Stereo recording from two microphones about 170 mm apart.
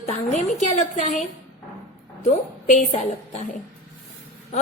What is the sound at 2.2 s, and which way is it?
A woman's voice, 45° left (ahead or behind).